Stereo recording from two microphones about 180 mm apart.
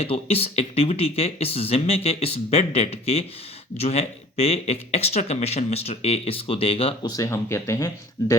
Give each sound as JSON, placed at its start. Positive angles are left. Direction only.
{"t": 0.0, "sound": "speech", "side_deg": 35}
{"t": 7.1, "sound": "speech", "side_deg": 15}